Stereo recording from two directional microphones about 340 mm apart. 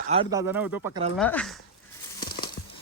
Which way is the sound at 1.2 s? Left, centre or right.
Centre.